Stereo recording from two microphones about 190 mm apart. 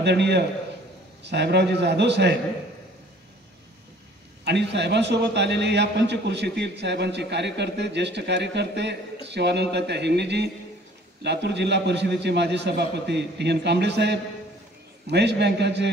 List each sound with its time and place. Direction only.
0.0 s a man's voice: 65° right (ahead or behind)
4.5 s a man's voice: 65° right (ahead or behind)